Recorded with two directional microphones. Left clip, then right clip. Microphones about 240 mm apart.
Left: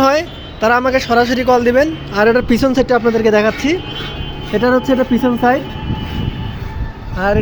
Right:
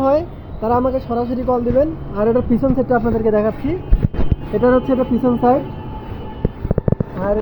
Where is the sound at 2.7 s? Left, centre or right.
Left.